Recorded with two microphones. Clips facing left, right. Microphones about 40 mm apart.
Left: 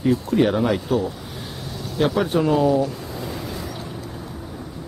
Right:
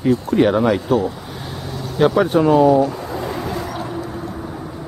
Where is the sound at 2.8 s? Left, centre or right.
Right.